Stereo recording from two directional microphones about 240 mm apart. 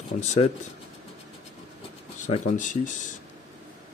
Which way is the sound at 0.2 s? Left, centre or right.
Left.